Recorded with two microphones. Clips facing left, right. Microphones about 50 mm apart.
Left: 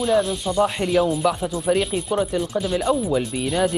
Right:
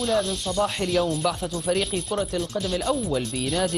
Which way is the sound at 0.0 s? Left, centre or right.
Centre.